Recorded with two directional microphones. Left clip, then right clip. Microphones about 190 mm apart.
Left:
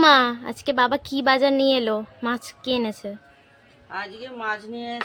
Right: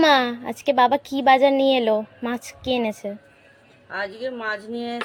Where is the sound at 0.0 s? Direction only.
Centre (ahead or behind).